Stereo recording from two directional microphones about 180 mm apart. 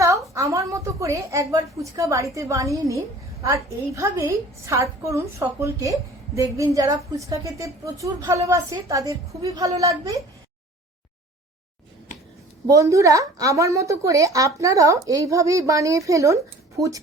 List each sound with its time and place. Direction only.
0.0 s a sound: 15° right (ahead or behind)
0.5 s a woman's voice: 15° right (ahead or behind)
12.6 s a woman's voice: 20° right (ahead or behind)